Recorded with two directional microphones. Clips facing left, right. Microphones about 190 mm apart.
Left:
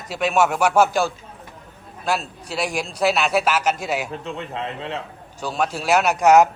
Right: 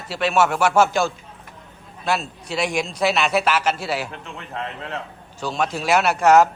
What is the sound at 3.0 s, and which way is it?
A man's voice, 10° left (ahead or behind).